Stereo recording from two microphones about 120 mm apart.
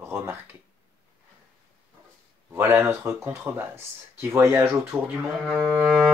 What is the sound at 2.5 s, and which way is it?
Speech, 20° right (ahead or behind).